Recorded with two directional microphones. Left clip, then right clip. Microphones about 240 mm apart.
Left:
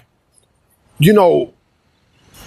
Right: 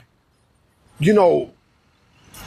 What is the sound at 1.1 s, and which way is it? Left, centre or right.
Speech, left.